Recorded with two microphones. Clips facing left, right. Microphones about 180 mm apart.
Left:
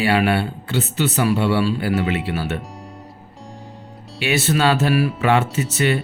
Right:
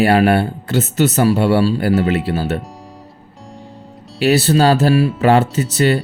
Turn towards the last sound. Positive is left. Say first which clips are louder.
# right 4 dB
turn(degrees=-35)  # may be behind; listen again after turning